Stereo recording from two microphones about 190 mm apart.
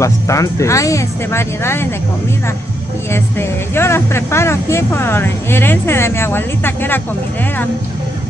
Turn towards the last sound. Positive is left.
turn(degrees=10)  # may be behind; listen again after turning